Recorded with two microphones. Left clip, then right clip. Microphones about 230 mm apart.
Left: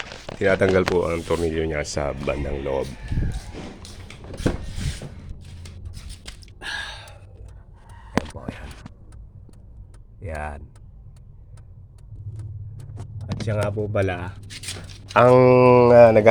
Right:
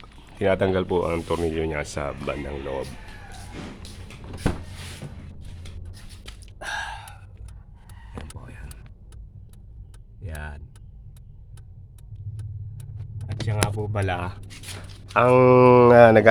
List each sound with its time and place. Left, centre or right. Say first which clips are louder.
0.3 s speech: left 3 dB; centre
6.4 s gasp: even; centre
8.9 s vehicle: left 10 dB; centre
10.2 s vehicle: left 8 dB; centre
13.2 s speech: left 2 dB; centre
15.1 s speech: left 4 dB; centre
15.4 s speech: left 1 dB; centre